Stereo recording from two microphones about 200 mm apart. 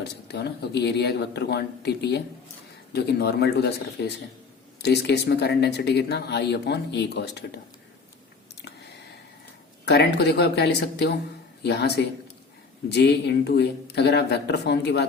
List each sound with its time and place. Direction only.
0.0 s speech: 55° left (ahead or behind)
9.8 s speech: 55° left (ahead or behind)